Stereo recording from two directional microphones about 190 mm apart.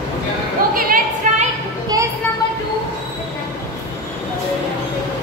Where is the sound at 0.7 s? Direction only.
50° right (ahead or behind).